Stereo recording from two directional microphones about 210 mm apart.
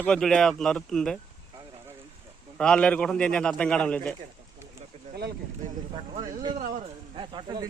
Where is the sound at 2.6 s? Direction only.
5° left (ahead or behind).